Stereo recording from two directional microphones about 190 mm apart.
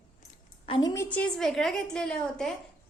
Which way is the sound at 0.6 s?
25° left (ahead or behind).